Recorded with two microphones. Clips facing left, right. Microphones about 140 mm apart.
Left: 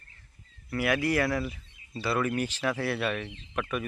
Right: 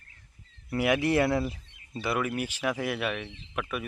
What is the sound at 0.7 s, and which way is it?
Speech, 20° right (ahead or behind).